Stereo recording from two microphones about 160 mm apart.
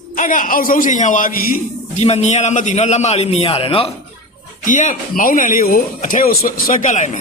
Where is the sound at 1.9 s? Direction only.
40° left (ahead or behind).